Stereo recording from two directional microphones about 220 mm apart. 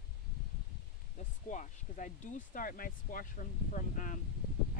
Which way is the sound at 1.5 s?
35° left (ahead or behind).